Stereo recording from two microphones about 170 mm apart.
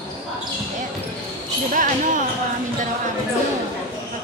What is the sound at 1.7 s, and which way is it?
Speech, 50° right (ahead or behind).